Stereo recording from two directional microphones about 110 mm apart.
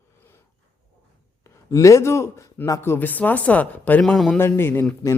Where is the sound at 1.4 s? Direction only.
30° left (ahead or behind).